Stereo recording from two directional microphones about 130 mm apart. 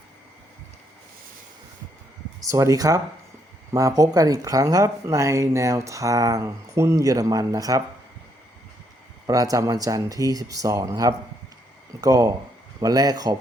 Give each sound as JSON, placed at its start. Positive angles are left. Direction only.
{"t": 2.5, "sound": "speech", "side_deg": -25}
{"t": 9.2, "sound": "speech", "side_deg": -30}